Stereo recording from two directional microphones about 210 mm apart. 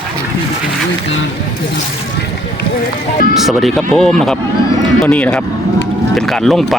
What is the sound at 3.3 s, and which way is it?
Speech, centre (ahead or behind).